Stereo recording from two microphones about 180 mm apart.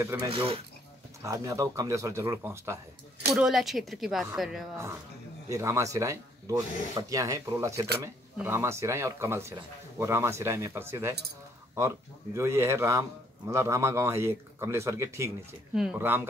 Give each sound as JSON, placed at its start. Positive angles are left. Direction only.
{"t": 0.0, "sound": "speech", "side_deg": -15}
{"t": 0.3, "sound": "speech", "side_deg": -30}
{"t": 1.2, "sound": "speech", "side_deg": -20}
{"t": 3.3, "sound": "speech", "side_deg": 0}
{"t": 5.5, "sound": "speech", "side_deg": -15}
{"t": 12.4, "sound": "speech", "side_deg": -15}
{"t": 15.7, "sound": "speech", "side_deg": -5}